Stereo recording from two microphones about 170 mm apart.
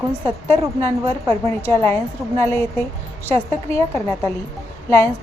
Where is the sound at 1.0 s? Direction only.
35° right (ahead or behind).